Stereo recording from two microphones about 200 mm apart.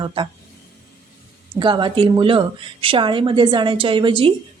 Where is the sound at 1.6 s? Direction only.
25° right (ahead or behind).